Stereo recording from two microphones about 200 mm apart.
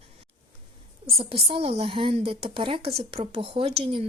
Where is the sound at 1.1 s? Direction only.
30° right (ahead or behind).